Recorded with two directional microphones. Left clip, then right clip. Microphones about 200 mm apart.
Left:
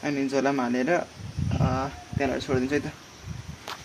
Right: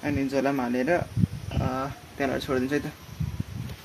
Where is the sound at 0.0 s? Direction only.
5° right (ahead or behind).